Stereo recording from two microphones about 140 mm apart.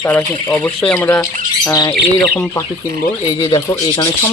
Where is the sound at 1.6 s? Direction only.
25° left (ahead or behind).